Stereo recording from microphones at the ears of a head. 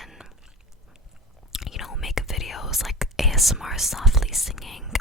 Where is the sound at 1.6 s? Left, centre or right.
Left.